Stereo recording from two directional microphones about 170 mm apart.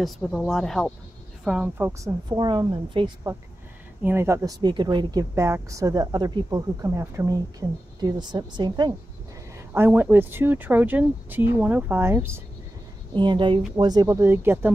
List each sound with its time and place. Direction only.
0.0 s speech: centre (ahead or behind)
2.2 s speech: 25° right (ahead or behind)
4.0 s speech: 15° right (ahead or behind)
9.8 s speech: 10° right (ahead or behind)
13.1 s speech: 25° right (ahead or behind)